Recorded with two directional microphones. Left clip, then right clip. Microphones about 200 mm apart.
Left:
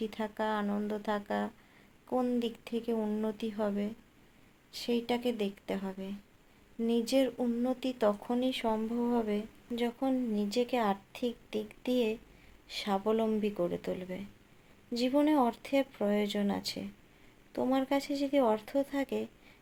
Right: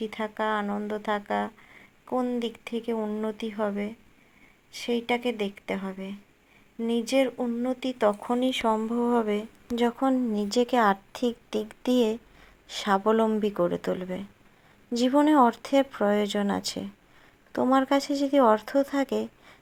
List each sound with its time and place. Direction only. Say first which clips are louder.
0.0 s a woman's voice: right 5 dB; 15° right (ahead or behind)